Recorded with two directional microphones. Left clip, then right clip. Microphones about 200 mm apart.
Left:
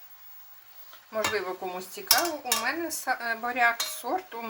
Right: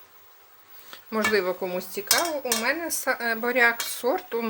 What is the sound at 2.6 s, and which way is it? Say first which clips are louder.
Speech: right 4 dB; 60° right (ahead or behind).